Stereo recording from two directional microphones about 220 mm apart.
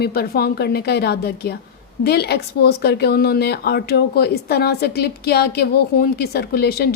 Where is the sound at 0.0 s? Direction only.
45° left (ahead or behind).